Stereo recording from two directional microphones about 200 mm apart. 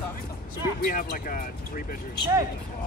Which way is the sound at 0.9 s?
45° left (ahead or behind).